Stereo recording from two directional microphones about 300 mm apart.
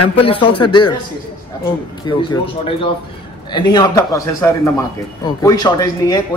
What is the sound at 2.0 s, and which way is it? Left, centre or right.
A man's voice, centre.